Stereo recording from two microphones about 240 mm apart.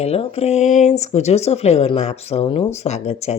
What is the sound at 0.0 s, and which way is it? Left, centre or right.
Speech, left.